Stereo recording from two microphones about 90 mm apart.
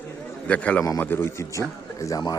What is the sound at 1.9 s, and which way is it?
Speech, 40° left (ahead or behind).